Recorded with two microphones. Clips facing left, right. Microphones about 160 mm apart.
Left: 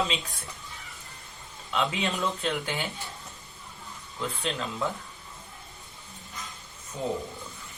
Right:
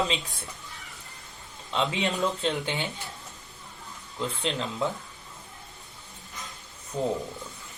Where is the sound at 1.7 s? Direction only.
25° right (ahead or behind).